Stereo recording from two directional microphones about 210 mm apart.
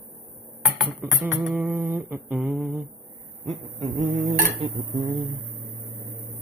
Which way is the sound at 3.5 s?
25° right (ahead or behind).